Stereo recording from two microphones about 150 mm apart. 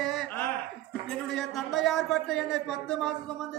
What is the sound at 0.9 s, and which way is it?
A man's voice, 5° left (ahead or behind).